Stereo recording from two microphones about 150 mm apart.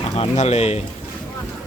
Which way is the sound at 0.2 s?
45° left (ahead or behind).